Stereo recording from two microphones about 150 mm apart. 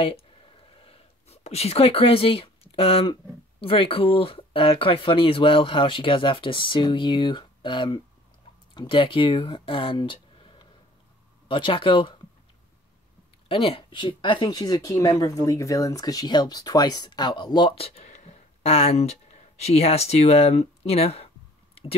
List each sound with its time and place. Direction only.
0.0 s a sound: 40° left (ahead or behind)
3.6 s speech: 40° left (ahead or behind)
13.5 s speech: 35° left (ahead or behind)